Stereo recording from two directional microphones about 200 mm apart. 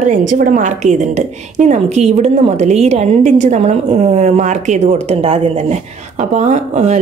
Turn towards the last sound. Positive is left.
turn(degrees=-35)  # may be behind; listen again after turning